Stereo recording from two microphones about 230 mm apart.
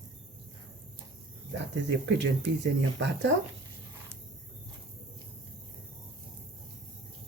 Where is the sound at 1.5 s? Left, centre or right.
Right.